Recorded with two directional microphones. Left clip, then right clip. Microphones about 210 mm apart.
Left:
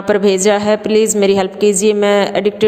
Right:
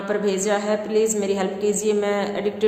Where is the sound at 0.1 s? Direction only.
40° left (ahead or behind).